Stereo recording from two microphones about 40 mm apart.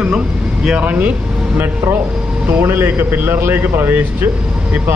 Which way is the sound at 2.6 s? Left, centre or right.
Right.